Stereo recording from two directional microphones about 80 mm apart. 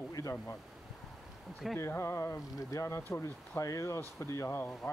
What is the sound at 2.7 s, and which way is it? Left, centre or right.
Speech, left.